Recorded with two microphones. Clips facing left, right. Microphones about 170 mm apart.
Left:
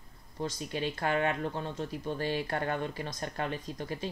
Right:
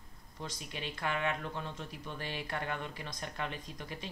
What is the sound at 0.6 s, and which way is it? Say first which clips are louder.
Speech: left 5 dB; 35° left (ahead or behind).